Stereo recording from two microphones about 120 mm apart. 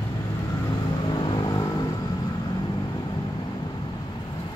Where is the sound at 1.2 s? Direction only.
40° left (ahead or behind).